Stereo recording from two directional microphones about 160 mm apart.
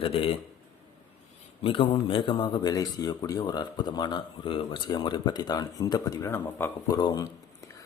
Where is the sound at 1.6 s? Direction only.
35° left (ahead or behind).